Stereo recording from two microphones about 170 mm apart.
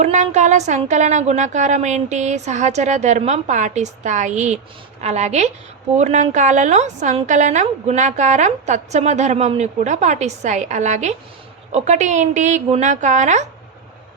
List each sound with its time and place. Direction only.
0.0 s speech: 45° right (ahead or behind)